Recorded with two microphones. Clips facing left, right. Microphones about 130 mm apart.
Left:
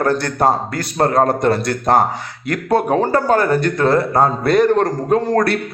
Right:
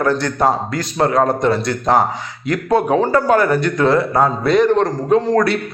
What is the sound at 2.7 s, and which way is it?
A man's voice, 40° left (ahead or behind).